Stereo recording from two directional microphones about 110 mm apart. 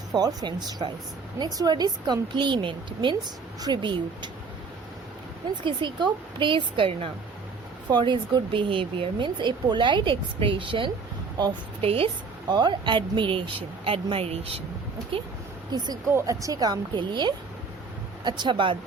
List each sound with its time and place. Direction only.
0.1 s speech: 35° right (ahead or behind)
5.6 s speech: 45° right (ahead or behind)
7.9 s speech: 45° right (ahead or behind)
11.8 s speech: 60° right (ahead or behind)
12.5 s speech: 40° right (ahead or behind); by 14.6 s 65° right (ahead or behind)
16.0 s speech: 30° right (ahead or behind); by 18.8 s 50° right (ahead or behind)